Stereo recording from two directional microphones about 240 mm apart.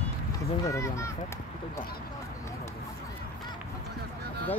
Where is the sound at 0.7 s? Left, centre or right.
Centre.